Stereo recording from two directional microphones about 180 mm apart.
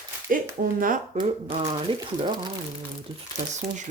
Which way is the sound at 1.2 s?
35° right (ahead or behind).